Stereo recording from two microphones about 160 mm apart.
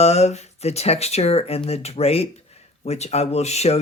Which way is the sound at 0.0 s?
45° left (ahead or behind).